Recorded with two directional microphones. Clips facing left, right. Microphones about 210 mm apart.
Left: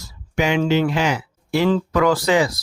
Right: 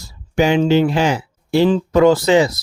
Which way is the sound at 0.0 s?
30° right (ahead or behind).